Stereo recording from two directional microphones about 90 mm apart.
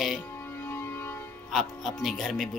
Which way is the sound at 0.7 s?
25° left (ahead or behind).